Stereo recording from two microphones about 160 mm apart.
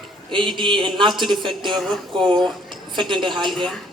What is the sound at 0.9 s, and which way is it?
A woman's voice, 30° right (ahead or behind).